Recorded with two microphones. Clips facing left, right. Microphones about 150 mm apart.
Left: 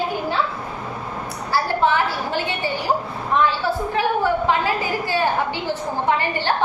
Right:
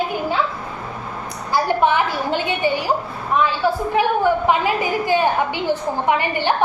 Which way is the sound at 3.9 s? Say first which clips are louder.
Right 2 dB; 15° right (ahead or behind).